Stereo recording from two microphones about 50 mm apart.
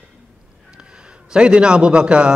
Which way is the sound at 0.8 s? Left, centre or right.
Centre.